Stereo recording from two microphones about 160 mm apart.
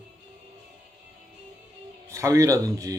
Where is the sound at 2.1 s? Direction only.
20° right (ahead or behind).